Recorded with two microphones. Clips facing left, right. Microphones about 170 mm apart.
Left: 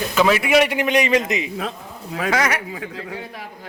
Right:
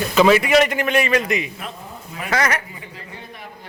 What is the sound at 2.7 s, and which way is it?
Speech, 90° left.